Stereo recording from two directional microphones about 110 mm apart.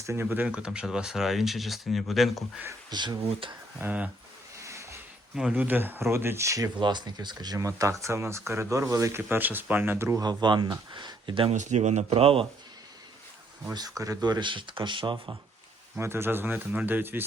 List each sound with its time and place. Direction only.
0.0 s speech: 25° right (ahead or behind); by 2.4 s centre (ahead or behind)
2.9 s speech: 40° right (ahead or behind)
3.4 s speech: 50° right (ahead or behind)
3.8 s speech: 15° right (ahead or behind)
4.6 s a sound: 25° right (ahead or behind)
5.3 s speech: 5° right (ahead or behind)
5.5 s speech: 15° right (ahead or behind)
6.7 s speech: 40° right (ahead or behind)
8.0 s speech: 25° right (ahead or behind)
10.2 s speech: 45° right (ahead or behind)
11.4 s speech: 90° right; by 12.5 s 60° right (ahead or behind)
14.0 s speech: 35° right (ahead or behind)
16.0 s speech: 20° right (ahead or behind)